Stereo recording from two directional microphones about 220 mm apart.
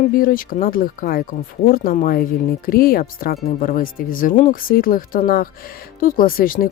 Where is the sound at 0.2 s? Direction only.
40° left (ahead or behind).